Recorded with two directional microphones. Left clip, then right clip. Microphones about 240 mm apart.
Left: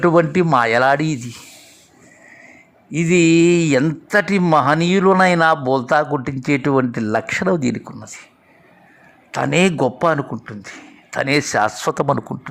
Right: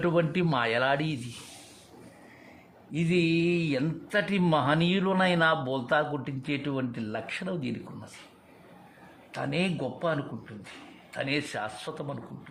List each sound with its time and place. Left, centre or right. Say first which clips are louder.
0.0 s speech: left 12 dB; left
2.9 s speech: left 13 dB; left
9.3 s a man's voice: left 14 dB; left